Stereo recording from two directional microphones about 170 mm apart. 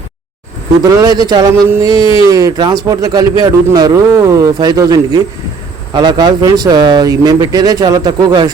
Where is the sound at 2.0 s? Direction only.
30° left (ahead or behind).